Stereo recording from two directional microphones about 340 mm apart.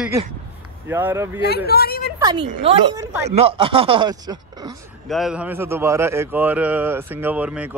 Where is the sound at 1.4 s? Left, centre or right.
Left.